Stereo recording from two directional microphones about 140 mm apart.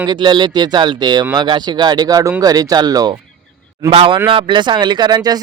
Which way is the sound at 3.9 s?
40° right (ahead or behind).